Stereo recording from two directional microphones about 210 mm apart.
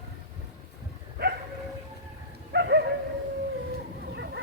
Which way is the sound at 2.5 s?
50° right (ahead or behind).